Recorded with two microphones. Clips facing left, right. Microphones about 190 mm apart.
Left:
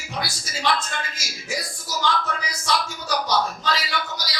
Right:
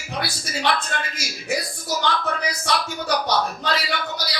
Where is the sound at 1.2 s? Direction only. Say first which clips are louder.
Right 5 dB; 60° right (ahead or behind).